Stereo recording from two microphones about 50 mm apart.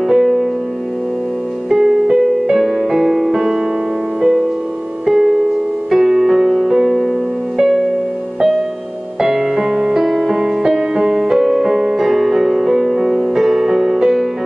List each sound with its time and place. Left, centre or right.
0.0 s music: centre
1.7 s music: centre
5.0 s music: centre
9.2 s music: centre